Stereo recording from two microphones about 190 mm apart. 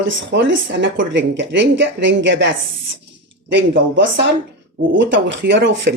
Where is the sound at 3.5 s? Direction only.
75° right (ahead or behind).